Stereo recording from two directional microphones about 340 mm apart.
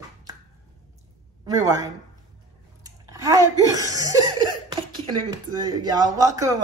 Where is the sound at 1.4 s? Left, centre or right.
Centre.